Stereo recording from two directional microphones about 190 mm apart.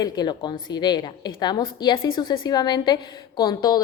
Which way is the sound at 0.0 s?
20° left (ahead or behind).